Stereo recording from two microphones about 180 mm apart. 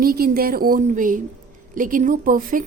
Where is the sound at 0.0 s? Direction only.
55° right (ahead or behind).